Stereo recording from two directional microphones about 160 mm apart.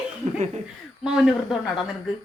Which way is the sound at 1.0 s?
Centre (ahead or behind).